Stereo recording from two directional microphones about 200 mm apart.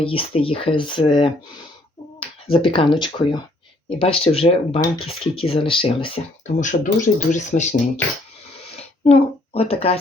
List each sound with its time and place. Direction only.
0.0 s speech: 30° left (ahead or behind)
6.6 s speech: 40° left (ahead or behind)
9.0 s speech: 30° left (ahead or behind)